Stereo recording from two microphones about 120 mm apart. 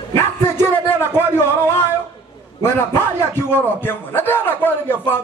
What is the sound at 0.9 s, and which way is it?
A man's voice, 20° left (ahead or behind).